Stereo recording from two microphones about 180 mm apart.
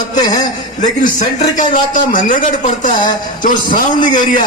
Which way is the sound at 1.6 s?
45° left (ahead or behind).